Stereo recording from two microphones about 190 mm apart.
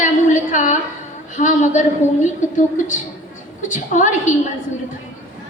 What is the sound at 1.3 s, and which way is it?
A woman's voice, 40° left (ahead or behind).